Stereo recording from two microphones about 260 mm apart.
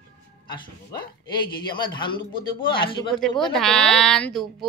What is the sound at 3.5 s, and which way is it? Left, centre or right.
Speech, centre.